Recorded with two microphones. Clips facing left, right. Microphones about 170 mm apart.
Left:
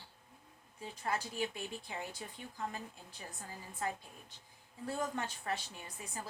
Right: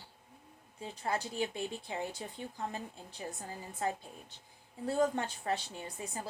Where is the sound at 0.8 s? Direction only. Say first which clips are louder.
Right 2 dB; 25° right (ahead or behind).